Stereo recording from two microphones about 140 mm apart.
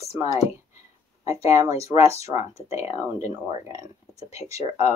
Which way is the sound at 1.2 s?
20° right (ahead or behind).